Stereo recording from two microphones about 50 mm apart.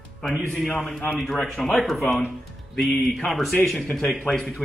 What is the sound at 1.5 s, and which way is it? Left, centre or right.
Speech, centre.